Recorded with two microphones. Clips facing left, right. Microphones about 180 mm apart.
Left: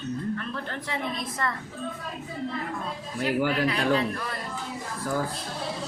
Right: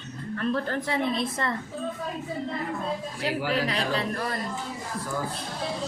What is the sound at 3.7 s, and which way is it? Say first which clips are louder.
Speech: left 3 dB; 35° right (ahead or behind).